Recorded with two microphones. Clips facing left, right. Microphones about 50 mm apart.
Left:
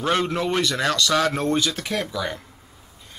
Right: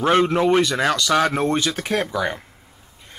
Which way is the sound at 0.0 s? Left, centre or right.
Right.